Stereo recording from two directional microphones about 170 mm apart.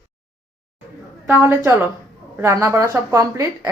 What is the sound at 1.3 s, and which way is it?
A woman's voice, 15° right (ahead or behind).